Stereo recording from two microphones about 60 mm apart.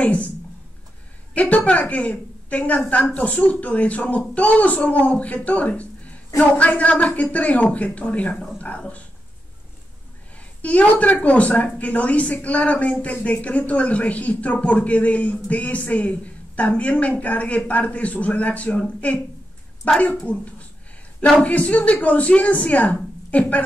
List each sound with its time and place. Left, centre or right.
0.0 s speech: left
1.3 s a woman's voice: left
10.6 s a woman's voice: left